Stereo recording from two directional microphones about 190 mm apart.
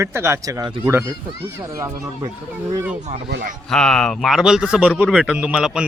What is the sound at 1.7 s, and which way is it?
Speech, 15° right (ahead or behind).